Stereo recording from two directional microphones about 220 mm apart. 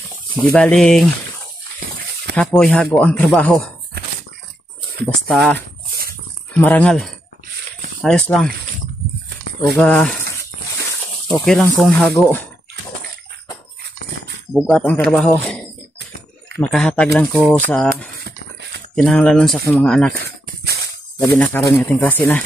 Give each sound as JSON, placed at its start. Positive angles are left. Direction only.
{"t": 0.5, "sound": "speech", "side_deg": 5}
{"t": 2.3, "sound": "speech", "side_deg": 5}
{"t": 5.3, "sound": "speech", "side_deg": 5}
{"t": 9.8, "sound": "speech", "side_deg": 0}
{"t": 11.3, "sound": "speech", "side_deg": 0}
{"t": 14.5, "sound": "speech", "side_deg": -5}
{"t": 16.5, "sound": "speech", "side_deg": 5}
{"t": 18.2, "sound": "a sound", "side_deg": -50}
{"t": 18.9, "sound": "speech", "side_deg": 5}
{"t": 20.2, "sound": "dog", "side_deg": -45}
{"t": 21.2, "sound": "speech", "side_deg": 10}